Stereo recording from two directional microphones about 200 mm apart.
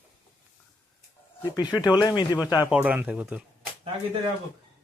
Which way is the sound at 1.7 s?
20° left (ahead or behind).